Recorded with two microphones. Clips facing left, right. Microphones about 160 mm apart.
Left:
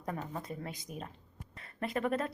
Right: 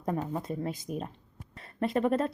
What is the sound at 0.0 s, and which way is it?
Speech, 30° right (ahead or behind).